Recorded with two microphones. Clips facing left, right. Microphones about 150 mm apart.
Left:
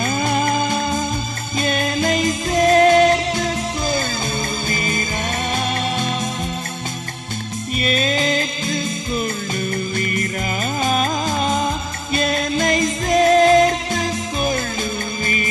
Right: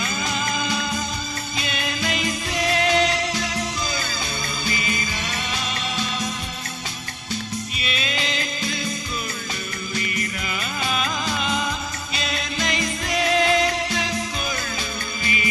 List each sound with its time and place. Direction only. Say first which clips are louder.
0.0 s music: left 8 dB; 55° left (ahead or behind)
7.8 s music: left 11 dB; 45° left (ahead or behind)
10.8 s music: left 6 dB; 45° left (ahead or behind)